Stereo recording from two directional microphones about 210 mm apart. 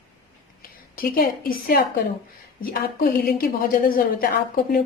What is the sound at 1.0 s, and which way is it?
A woman's voice, 45° left (ahead or behind).